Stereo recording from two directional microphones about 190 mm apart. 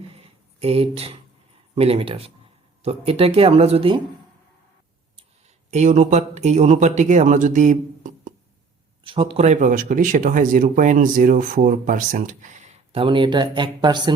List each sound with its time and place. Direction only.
0.1 s a sound: 30° right (ahead or behind)
1.7 s speech: 30° right (ahead or behind)
5.7 s speech: 40° right (ahead or behind)
9.0 s speech: 30° right (ahead or behind)